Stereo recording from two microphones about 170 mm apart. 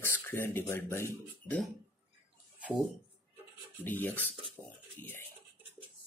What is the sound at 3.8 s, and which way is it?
Speech, 10° left (ahead or behind).